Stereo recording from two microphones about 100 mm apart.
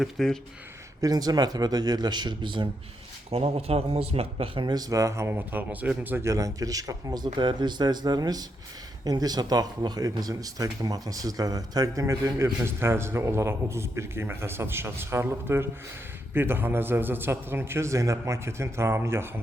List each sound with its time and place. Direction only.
0.0 s speech: 5° left (ahead or behind)
1.0 s speech: 40° right (ahead or behind)
3.3 s speech: 90° right
4.6 s speech: 40° right (ahead or behind); by 6.3 s 20° right (ahead or behind)
6.3 s speech: 35° right (ahead or behind)